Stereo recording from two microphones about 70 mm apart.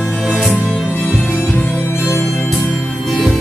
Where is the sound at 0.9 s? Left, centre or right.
Left.